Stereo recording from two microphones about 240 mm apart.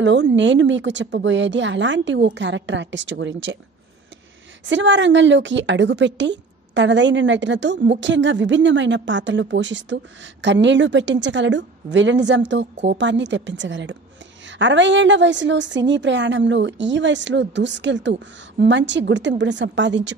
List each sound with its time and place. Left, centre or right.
0.0 s a woman's voice: right
4.6 s a woman's voice: right